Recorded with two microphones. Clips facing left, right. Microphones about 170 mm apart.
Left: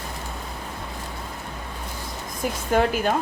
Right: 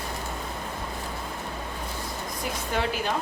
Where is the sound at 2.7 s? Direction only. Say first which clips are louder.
Left 8 dB; 50° left (ahead or behind).